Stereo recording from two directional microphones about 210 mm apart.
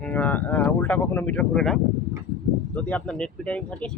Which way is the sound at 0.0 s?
5° left (ahead or behind).